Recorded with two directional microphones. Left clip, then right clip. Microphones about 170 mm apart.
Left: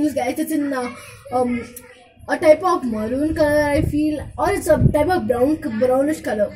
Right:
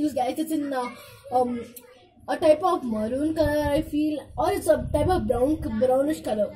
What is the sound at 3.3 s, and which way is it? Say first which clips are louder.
A child's voice: left 7 dB; 30° left (ahead or behind).